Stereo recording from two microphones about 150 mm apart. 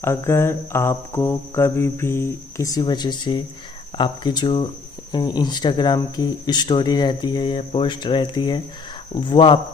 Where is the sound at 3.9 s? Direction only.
30° left (ahead or behind).